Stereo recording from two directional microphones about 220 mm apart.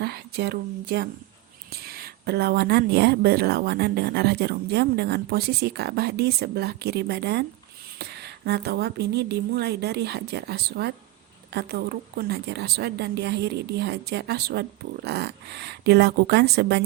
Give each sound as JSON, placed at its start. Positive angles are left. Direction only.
{"t": 0.0, "sound": "a woman's voice", "side_deg": -45}